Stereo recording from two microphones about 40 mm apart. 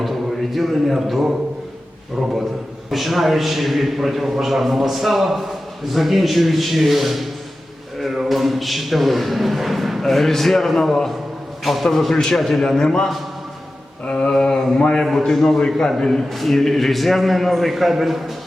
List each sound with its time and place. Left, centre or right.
0.0 s a man's voice: centre
2.9 s a man's voice: centre
8.3 s a man's voice: centre; by 15.0 s left
15.0 s a man's voice: centre